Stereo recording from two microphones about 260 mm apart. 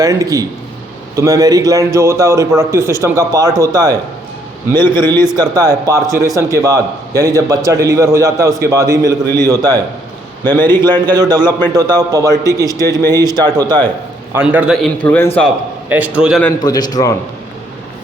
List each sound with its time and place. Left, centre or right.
0.0 s a man's voice: centre
4.7 s a man's voice: centre
5.4 s a man's voice: centre
9.2 s a man's voice: centre
11.1 s a man's voice: centre
16.4 s a man's voice: centre